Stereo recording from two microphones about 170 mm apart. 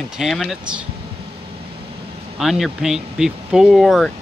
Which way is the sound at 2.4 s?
Centre (ahead or behind).